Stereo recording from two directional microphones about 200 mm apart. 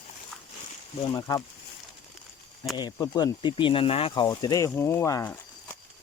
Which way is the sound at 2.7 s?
20° left (ahead or behind).